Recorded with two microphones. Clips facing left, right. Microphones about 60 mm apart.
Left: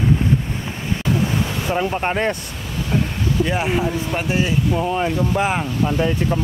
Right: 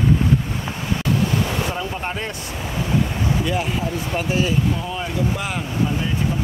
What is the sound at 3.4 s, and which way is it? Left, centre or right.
Speech, left.